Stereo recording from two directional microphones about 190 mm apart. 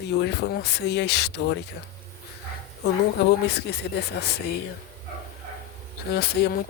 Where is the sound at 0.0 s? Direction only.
60° left (ahead or behind).